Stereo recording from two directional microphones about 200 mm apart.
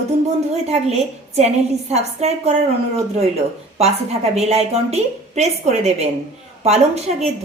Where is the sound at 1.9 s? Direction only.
35° right (ahead or behind).